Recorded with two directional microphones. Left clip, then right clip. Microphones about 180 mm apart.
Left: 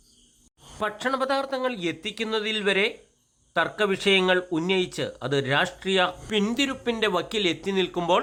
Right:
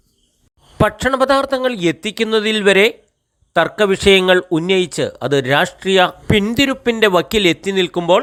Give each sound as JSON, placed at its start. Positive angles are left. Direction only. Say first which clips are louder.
{"t": 0.8, "sound": "speech", "louder": "right 11 dB", "side_deg": -35}